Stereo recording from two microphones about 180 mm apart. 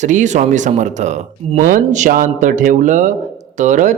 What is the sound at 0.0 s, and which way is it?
Speech, 40° right (ahead or behind).